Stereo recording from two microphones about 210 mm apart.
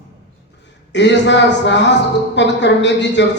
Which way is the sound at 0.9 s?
55° left (ahead or behind).